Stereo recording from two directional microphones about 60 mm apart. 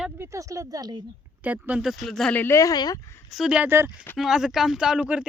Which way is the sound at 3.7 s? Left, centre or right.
Right.